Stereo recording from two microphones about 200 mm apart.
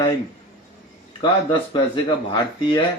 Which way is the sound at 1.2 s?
25° left (ahead or behind).